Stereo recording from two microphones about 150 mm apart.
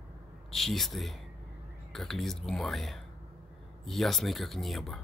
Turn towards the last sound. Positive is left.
turn(degrees=0)  # may be behind; listen again after turning